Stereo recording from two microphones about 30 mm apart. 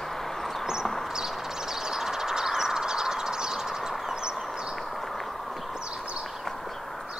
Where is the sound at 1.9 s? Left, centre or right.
Centre.